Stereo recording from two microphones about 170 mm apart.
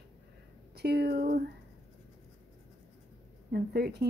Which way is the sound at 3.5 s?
70° right (ahead or behind).